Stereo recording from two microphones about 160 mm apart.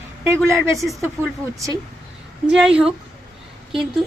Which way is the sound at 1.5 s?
20° right (ahead or behind).